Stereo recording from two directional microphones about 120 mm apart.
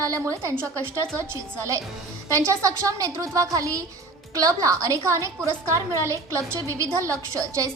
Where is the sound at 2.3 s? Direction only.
25° right (ahead or behind).